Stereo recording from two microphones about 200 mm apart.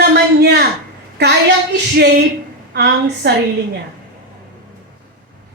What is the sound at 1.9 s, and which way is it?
Speech, 55° right (ahead or behind).